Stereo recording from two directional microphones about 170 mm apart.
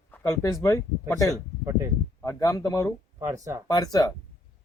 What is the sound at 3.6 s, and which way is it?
Speech, 20° left (ahead or behind).